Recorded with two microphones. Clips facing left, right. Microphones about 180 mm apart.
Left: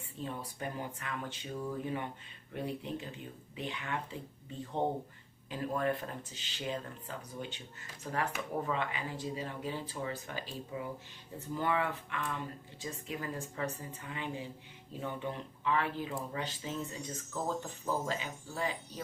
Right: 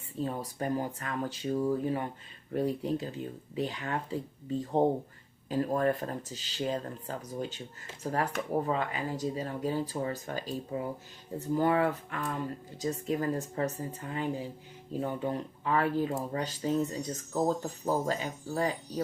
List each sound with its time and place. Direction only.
0.2 s speech: 40° right (ahead or behind)